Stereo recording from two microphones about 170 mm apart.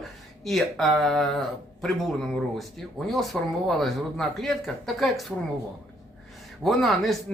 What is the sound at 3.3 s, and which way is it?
Speech, 5° left (ahead or behind).